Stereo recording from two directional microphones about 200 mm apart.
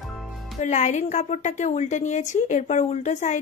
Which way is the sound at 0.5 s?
35° left (ahead or behind).